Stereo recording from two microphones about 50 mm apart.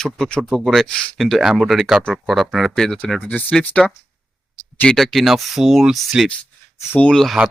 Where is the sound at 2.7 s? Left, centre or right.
Centre.